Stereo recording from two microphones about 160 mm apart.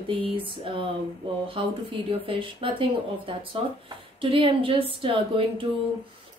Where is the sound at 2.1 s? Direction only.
35° right (ahead or behind).